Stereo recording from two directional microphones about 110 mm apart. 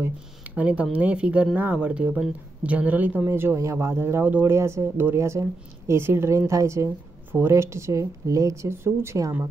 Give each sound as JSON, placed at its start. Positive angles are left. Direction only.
{"t": 0.0, "sound": "speech", "side_deg": -15}